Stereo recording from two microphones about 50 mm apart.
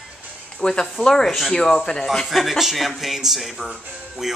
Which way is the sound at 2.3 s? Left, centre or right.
Centre.